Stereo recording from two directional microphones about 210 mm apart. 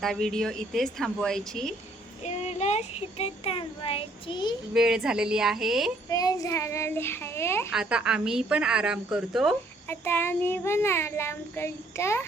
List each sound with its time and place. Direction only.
0.0 s a woman's voice: centre (ahead or behind)
2.2 s a child's voice: 30° left (ahead or behind)
4.7 s a woman's voice: 5° right (ahead or behind)
6.1 s a child's voice: 15° left (ahead or behind)
7.7 s a woman's voice: 5° right (ahead or behind)
9.9 s a child's voice: 10° left (ahead or behind)